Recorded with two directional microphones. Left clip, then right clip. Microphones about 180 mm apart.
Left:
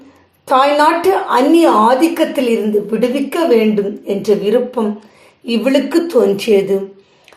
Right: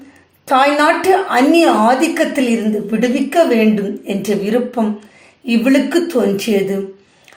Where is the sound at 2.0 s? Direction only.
25° left (ahead or behind).